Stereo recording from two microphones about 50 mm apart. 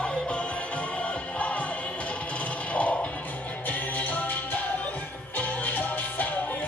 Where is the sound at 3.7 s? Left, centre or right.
Left.